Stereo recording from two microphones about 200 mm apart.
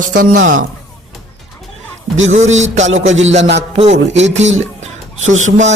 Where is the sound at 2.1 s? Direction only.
75° right (ahead or behind).